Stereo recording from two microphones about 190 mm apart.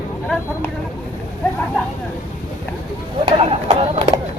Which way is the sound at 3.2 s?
30° right (ahead or behind).